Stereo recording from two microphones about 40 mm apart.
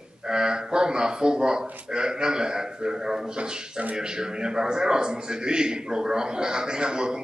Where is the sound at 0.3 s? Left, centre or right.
Centre.